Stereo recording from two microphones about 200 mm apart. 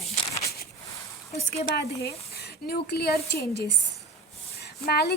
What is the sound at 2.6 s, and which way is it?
A woman's voice, 50° left (ahead or behind).